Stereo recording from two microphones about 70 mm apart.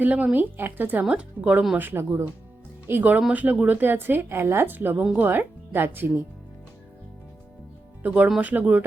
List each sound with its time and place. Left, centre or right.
0.0 s speech: right
1.0 s speech: centre
1.7 s speech: right
8.0 s speech: right